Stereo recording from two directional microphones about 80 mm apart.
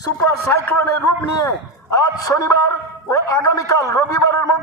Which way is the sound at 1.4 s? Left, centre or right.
Left.